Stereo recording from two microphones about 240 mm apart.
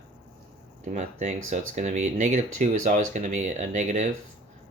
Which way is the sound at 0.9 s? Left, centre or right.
Right.